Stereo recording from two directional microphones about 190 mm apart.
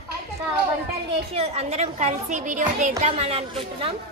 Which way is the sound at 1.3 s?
35° right (ahead or behind).